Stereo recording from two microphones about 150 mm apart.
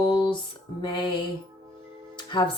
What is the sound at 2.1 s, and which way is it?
Music, 30° left (ahead or behind).